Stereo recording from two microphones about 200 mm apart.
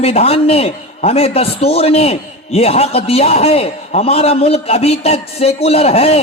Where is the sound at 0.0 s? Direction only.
30° left (ahead or behind).